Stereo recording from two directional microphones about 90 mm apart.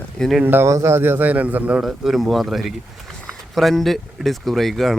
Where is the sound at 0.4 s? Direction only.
30° right (ahead or behind).